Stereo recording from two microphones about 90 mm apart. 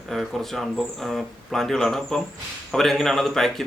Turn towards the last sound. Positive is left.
turn(degrees=5)  # may be behind; listen again after turning